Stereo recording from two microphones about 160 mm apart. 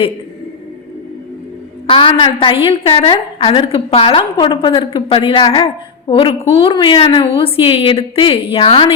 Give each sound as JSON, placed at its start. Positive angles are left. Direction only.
{"t": 1.9, "sound": "a woman's voice", "side_deg": 30}